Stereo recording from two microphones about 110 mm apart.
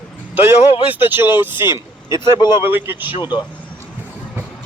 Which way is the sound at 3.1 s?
40° left (ahead or behind).